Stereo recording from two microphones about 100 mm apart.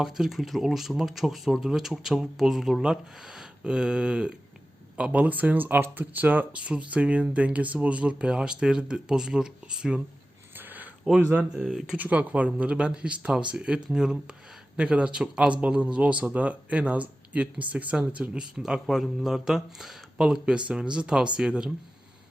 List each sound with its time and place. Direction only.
0.0 s a man's voice: 5° right (ahead or behind)
10.5 s a sound: 20° right (ahead or behind)
11.2 s a man's voice: 15° right (ahead or behind)
11.6 s speech: centre (ahead or behind)
11.9 s a man's voice: 15° right (ahead or behind)